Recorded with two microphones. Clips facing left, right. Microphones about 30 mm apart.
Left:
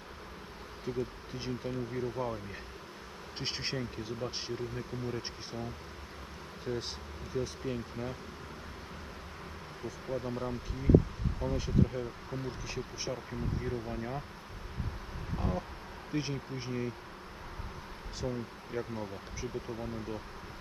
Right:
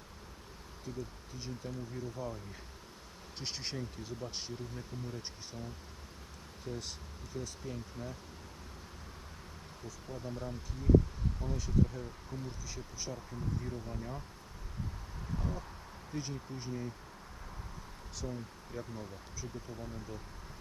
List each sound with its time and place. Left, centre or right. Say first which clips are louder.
0.9 s speech: left 7 dB; left
6.7 s speech: left 6 dB; left
9.8 s speech: left 8 dB; left
15.4 s speech: left 7 dB; left
18.2 s speech: left 5 dB; left